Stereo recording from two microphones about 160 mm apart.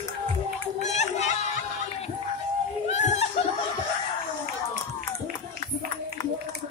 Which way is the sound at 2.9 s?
45° left (ahead or behind).